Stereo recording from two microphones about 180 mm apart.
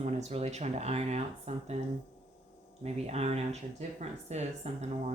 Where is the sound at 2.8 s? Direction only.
35° right (ahead or behind).